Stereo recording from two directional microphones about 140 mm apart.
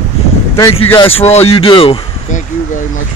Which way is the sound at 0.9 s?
45° left (ahead or behind).